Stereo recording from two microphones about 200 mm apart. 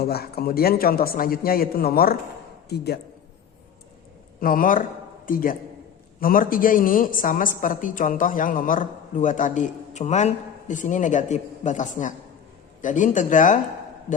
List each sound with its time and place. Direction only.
0.0 s a man's voice: 50° left (ahead or behind)
4.4 s a man's voice: 45° left (ahead or behind)